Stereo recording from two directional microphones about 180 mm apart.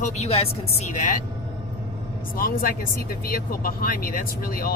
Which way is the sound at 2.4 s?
50° left (ahead or behind).